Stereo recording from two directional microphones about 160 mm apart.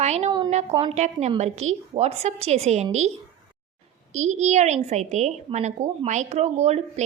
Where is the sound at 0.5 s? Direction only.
40° right (ahead or behind).